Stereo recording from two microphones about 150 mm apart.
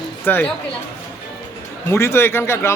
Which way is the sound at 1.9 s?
15° left (ahead or behind).